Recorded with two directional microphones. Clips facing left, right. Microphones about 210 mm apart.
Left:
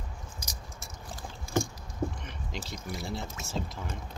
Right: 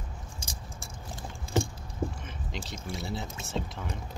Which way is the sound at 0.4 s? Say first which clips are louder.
Right 1 dB; 30° right (ahead or behind).